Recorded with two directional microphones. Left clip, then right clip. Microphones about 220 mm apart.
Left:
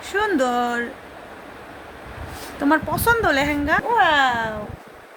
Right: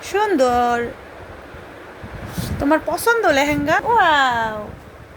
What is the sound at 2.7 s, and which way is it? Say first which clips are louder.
A woman's voice: right 1 dB; centre (ahead or behind).